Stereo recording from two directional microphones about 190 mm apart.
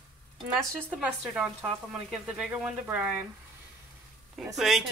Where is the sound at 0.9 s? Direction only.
5° right (ahead or behind).